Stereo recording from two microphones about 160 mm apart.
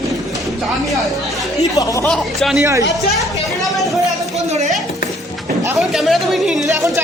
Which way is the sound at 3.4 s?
Centre (ahead or behind).